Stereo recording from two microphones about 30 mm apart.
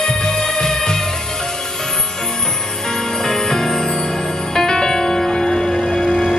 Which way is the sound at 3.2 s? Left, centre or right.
Centre.